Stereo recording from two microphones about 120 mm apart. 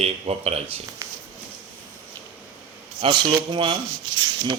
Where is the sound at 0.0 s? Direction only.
60° right (ahead or behind).